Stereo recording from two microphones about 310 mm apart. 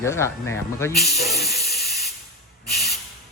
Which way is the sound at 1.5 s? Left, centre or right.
Left.